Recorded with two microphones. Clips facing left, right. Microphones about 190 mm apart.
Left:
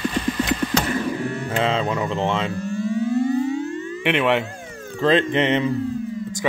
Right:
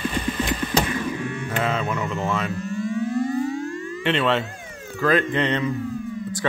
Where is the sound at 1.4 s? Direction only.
30° left (ahead or behind).